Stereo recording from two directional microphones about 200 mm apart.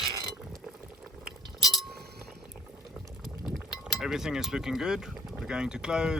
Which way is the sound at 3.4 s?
Centre (ahead or behind).